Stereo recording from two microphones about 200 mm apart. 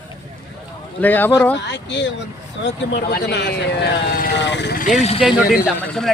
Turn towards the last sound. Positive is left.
turn(degrees=5)  # may be behind; listen again after turning